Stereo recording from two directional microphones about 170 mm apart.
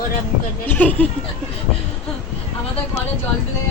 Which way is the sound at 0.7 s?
10° left (ahead or behind).